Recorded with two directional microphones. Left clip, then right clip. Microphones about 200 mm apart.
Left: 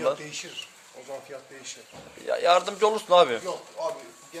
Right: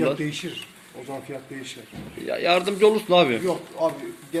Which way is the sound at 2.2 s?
10° left (ahead or behind).